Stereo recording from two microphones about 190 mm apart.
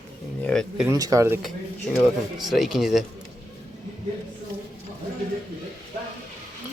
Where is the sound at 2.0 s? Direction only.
Centre (ahead or behind).